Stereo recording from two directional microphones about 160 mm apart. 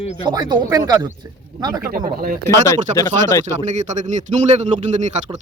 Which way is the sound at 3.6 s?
50° right (ahead or behind).